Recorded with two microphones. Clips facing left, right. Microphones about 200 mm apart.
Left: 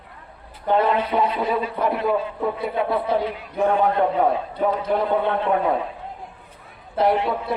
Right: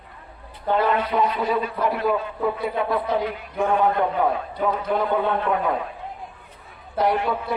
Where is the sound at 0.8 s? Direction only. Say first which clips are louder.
Left 1 dB; 25° left (ahead or behind).